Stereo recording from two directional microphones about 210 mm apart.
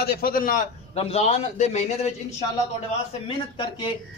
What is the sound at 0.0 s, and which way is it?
Speech, 45° left (ahead or behind).